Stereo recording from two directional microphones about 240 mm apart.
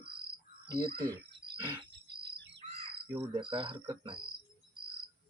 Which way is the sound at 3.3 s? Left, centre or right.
Right.